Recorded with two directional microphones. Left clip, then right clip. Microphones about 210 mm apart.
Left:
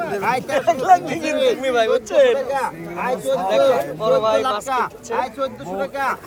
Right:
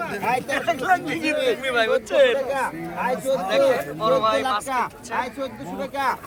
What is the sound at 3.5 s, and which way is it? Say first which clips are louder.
Speech: left 4 dB; 20° left (ahead or behind).